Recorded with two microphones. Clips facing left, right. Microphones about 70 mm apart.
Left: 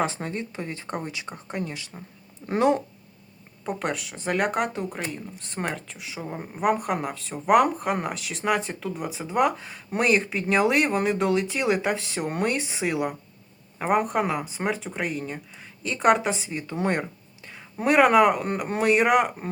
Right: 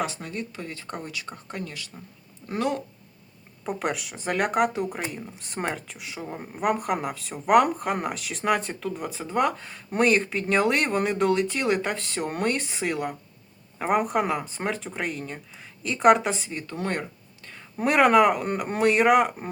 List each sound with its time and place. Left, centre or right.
0.0 s speech: left
3.6 s speech: centre
16.7 s speech: centre